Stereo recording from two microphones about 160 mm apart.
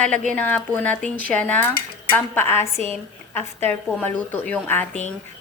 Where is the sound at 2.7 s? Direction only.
40° right (ahead or behind).